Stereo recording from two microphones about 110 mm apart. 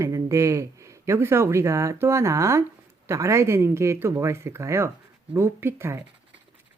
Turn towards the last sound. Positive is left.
turn(degrees=-25)  # may be behind; listen again after turning